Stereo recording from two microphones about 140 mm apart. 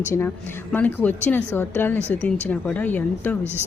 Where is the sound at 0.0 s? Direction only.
15° left (ahead or behind).